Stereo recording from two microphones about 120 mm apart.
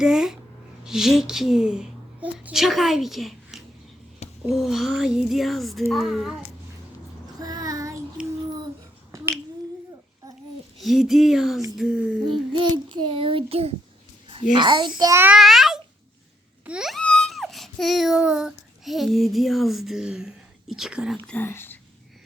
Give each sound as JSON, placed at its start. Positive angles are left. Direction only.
{"t": 0.0, "sound": "a woman's voice", "side_deg": -5}
{"t": 7.3, "sound": "child singing", "side_deg": -30}
{"t": 9.1, "sound": "finger snapping", "side_deg": -25}
{"t": 10.8, "sound": "speech", "side_deg": 0}
{"t": 12.5, "sound": "a child's voice", "side_deg": -45}
{"t": 14.6, "sound": "a child's voice", "side_deg": -40}
{"t": 15.3, "sound": "a child's voice", "side_deg": 0}
{"t": 16.6, "sound": "a sound", "side_deg": -5}
{"t": 21.2, "sound": "speech", "side_deg": 15}